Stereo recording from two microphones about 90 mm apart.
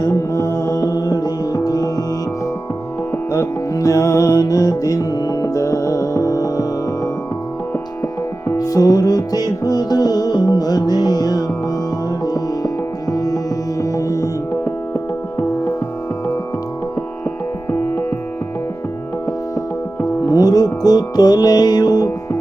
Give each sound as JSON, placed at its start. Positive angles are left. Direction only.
{"t": 0.0, "sound": "music", "side_deg": 35}
{"t": 3.3, "sound": "music", "side_deg": 40}
{"t": 14.5, "sound": "music", "side_deg": 25}
{"t": 17.7, "sound": "music", "side_deg": 25}
{"t": 20.2, "sound": "music", "side_deg": 45}